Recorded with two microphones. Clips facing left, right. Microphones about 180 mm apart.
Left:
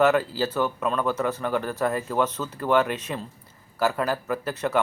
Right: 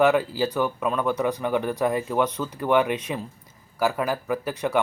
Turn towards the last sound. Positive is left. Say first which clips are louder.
# right 1 dB
turn(degrees=-15)  # may be behind; listen again after turning